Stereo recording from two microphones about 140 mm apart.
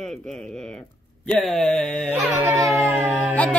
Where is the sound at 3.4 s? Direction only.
10° left (ahead or behind).